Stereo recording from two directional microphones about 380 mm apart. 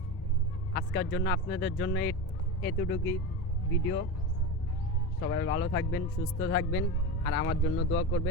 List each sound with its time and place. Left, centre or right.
0.7 s speech: left
5.2 s speech: left